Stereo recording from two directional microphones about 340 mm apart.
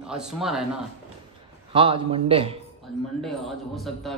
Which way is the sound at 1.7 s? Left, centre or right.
Centre.